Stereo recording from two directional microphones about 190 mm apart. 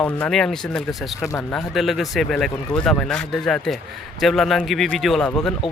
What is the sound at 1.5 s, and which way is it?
Speech, centre (ahead or behind).